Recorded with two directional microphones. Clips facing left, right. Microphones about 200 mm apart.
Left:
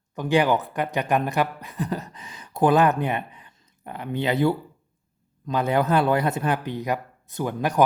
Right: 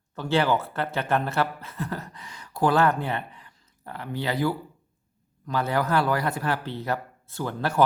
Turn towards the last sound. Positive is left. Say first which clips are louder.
# left 3 dB
turn(degrees=15)  # may be behind; listen again after turning